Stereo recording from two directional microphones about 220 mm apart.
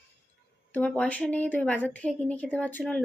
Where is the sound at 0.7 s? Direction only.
5° left (ahead or behind).